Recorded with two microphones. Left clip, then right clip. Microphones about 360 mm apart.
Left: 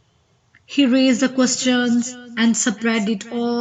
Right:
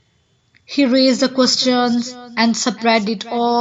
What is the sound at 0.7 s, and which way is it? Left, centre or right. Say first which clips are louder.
Speech: right 2 dB; centre.